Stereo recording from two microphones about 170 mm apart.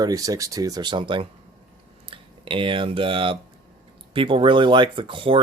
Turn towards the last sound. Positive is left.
turn(degrees=-30)  # may be behind; listen again after turning